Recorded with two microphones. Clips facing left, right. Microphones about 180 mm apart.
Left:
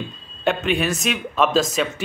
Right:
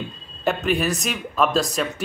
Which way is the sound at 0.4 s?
Centre (ahead or behind).